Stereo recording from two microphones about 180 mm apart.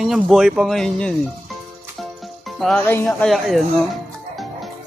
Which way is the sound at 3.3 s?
Centre (ahead or behind).